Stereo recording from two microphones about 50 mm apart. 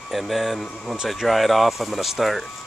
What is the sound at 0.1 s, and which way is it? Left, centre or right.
Speech, centre.